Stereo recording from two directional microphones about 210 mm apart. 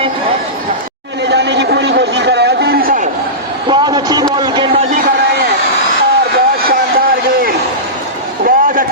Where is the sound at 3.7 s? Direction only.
20° right (ahead or behind).